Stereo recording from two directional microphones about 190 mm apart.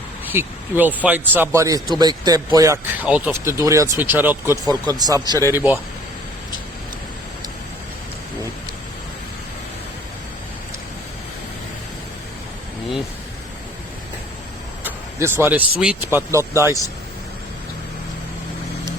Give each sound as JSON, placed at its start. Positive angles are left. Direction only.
{"t": 0.3, "sound": "speech", "side_deg": -10}
{"t": 14.8, "sound": "a sound", "side_deg": -10}
{"t": 15.8, "sound": "speech", "side_deg": -5}